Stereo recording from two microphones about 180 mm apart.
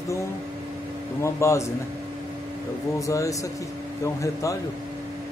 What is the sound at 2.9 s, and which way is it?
Speech, 15° left (ahead or behind).